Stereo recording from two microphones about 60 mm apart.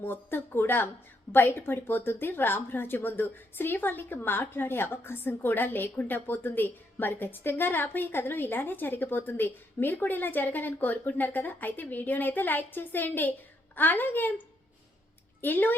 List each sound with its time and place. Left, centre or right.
0.0 s a woman's voice: left